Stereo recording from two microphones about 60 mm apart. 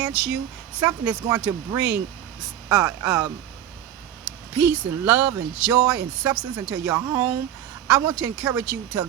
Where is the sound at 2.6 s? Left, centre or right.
Right.